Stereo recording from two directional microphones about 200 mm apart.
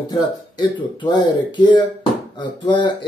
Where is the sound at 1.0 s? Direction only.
20° left (ahead or behind).